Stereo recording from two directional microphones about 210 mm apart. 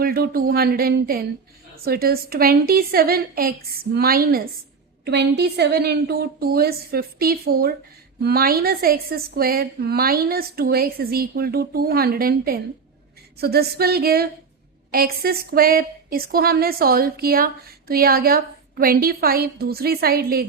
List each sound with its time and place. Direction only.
0.0 s a woman's voice: 45° right (ahead or behind)